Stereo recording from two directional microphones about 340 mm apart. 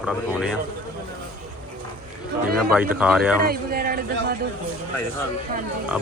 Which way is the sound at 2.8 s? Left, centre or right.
Centre.